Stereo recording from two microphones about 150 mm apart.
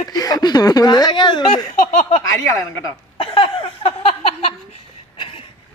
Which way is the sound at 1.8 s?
55° left (ahead or behind).